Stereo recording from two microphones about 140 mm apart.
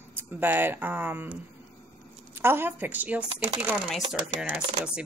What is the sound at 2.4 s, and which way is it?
Speech, 15° right (ahead or behind).